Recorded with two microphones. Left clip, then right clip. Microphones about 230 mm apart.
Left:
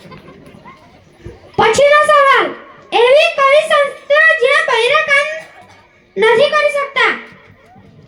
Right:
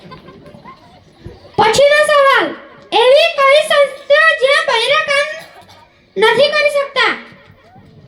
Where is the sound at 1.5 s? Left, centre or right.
Right.